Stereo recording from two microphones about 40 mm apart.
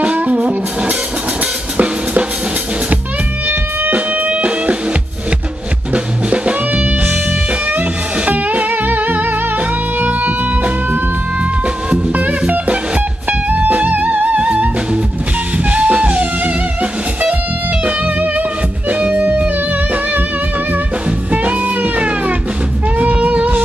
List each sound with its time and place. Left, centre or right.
0.0 s music: right
3.9 s music: right
6.3 s music: right
8.3 s music: right
12.4 s music: right
17.8 s music: right
21.3 s music: right